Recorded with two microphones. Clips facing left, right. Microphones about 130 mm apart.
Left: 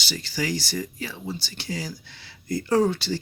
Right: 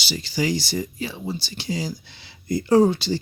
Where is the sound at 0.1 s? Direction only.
15° right (ahead or behind).